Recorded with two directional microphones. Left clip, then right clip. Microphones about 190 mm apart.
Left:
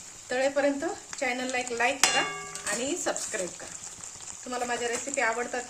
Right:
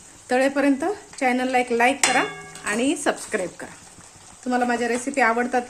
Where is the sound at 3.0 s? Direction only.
45° right (ahead or behind).